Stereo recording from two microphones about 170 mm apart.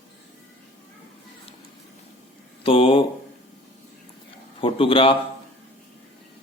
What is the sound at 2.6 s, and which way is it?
Speech, 30° left (ahead or behind).